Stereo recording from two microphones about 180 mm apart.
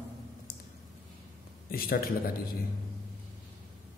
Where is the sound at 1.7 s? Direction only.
55° left (ahead or behind).